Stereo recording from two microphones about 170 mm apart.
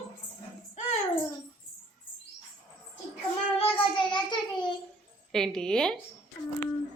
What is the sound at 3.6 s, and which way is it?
A child's voice, 30° left (ahead or behind).